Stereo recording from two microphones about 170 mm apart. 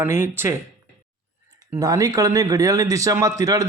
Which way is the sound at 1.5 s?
20° right (ahead or behind).